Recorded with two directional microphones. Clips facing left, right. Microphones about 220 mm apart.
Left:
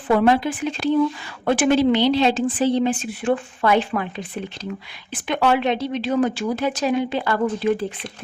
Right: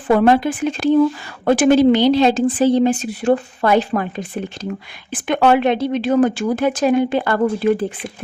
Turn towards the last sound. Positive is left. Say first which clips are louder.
# right 4 dB
turn(degrees=-50)  # may be behind; listen again after turning